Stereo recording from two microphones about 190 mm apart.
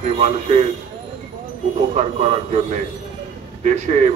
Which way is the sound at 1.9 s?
35° right (ahead or behind).